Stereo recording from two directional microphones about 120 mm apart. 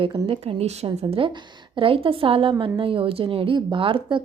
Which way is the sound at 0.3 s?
60° right (ahead or behind).